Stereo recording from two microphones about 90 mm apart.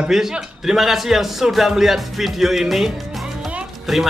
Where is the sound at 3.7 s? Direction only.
Centre (ahead or behind).